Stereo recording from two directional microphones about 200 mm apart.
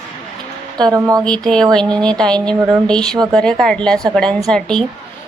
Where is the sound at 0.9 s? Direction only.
15° right (ahead or behind).